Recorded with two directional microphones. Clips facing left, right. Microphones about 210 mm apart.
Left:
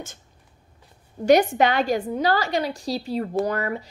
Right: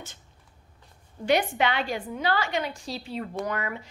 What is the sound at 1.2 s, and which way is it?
A woman's voice, 45° left (ahead or behind).